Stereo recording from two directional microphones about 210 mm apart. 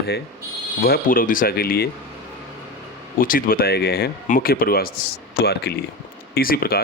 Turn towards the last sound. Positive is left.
turn(degrees=45)  # may be behind; listen again after turning